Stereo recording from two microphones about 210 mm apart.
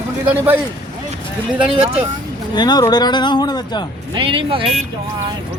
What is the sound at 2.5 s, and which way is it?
Speech, 20° left (ahead or behind).